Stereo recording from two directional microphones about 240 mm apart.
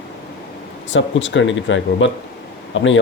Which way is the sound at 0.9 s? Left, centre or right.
Left.